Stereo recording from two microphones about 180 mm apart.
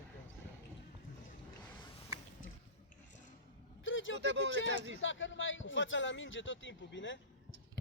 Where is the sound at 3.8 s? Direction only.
90° left.